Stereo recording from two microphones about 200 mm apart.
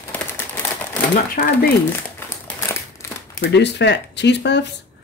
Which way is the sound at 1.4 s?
45° left (ahead or behind).